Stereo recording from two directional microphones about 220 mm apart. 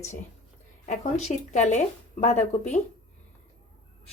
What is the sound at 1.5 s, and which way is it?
A woman's voice, 35° left (ahead or behind).